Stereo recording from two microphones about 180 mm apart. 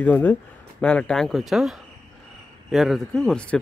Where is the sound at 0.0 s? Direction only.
10° left (ahead or behind).